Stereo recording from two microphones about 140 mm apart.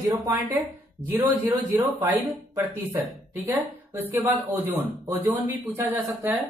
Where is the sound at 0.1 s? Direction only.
25° right (ahead or behind).